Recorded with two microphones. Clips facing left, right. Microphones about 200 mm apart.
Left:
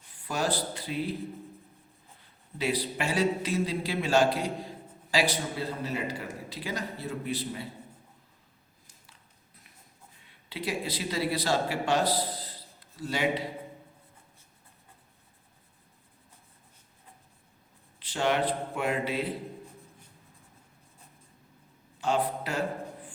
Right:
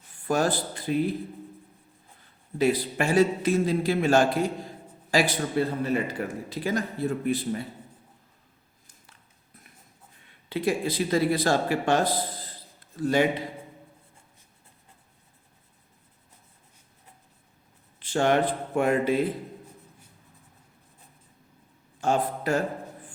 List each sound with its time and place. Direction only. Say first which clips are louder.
0.3 s speech: right 5 dB; 50° right (ahead or behind)
2.6 s speech: right 6 dB; 50° right (ahead or behind)
10.5 s speech: right 7 dB; 50° right (ahead or behind)
18.0 s speech: right 5 dB; 50° right (ahead or behind)
22.0 s speech: right 3 dB; 45° right (ahead or behind)